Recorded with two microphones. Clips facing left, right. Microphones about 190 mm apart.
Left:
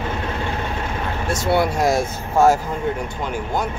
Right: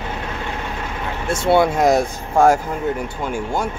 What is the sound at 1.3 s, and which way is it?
Speech, 25° right (ahead or behind).